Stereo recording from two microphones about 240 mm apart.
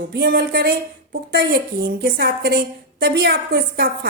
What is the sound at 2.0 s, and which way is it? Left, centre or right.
A woman's voice, right.